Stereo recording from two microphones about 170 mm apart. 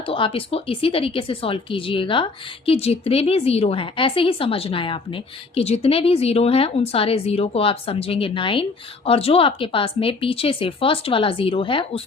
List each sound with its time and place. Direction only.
0.1 s a woman's voice: 30° left (ahead or behind)